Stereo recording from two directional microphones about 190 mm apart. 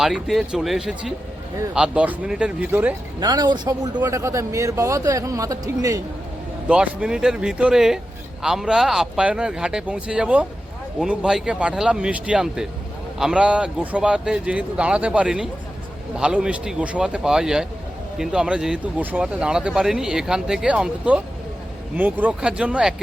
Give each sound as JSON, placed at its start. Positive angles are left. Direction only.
{"t": 0.0, "sound": "speech", "side_deg": 0}
{"t": 3.2, "sound": "speech", "side_deg": -20}
{"t": 6.7, "sound": "speech", "side_deg": -5}